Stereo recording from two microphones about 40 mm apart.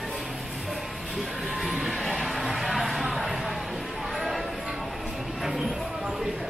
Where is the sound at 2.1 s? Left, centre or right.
Centre.